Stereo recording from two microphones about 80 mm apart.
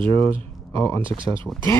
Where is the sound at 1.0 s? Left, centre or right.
Right.